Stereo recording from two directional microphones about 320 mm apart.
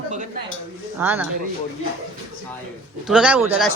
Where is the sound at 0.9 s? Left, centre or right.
Centre.